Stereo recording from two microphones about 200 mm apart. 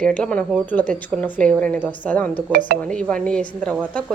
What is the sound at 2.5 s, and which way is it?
Speech, 40° right (ahead or behind).